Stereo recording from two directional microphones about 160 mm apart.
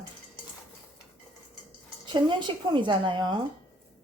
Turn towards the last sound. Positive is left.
turn(degrees=-30)  # may be behind; listen again after turning